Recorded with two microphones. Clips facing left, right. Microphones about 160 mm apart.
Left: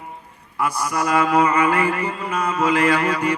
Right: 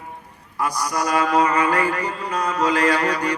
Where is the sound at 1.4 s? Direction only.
20° left (ahead or behind).